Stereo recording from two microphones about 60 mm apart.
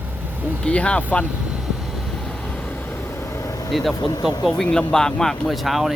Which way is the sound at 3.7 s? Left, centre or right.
Centre.